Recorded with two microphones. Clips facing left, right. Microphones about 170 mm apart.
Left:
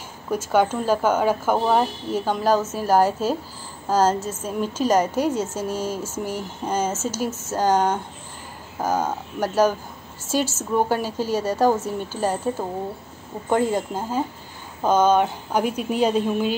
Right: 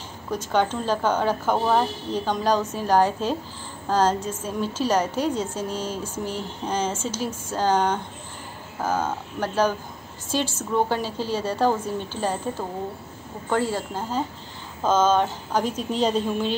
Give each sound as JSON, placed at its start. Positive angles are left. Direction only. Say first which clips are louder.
{"t": 0.3, "sound": "speech", "louder": "left 3 dB", "side_deg": 10}